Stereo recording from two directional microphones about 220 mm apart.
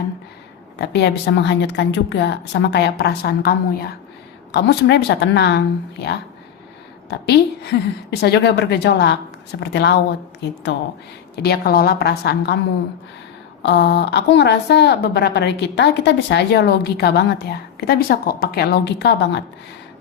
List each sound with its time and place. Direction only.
0.8 s a woman's voice: 50° left (ahead or behind)
7.1 s a woman's voice: 50° left (ahead or behind)
13.6 s a woman's voice: 50° left (ahead or behind)